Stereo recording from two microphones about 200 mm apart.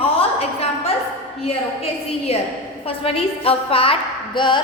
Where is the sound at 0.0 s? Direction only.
30° left (ahead or behind).